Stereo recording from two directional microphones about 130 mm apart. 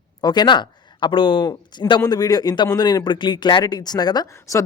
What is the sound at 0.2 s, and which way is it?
Speech, 35° left (ahead or behind).